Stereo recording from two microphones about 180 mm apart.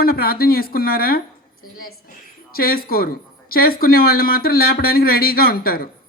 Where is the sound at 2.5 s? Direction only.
55° left (ahead or behind).